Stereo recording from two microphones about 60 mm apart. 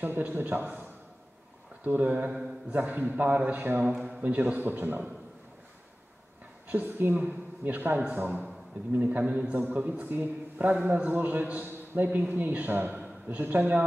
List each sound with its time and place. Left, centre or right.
0.0 s a man's voice: right
1.9 s a man's voice: right
3.9 s a man's voice: centre
4.2 s a man's voice: right
6.7 s a man's voice: right
10.0 s a man's voice: right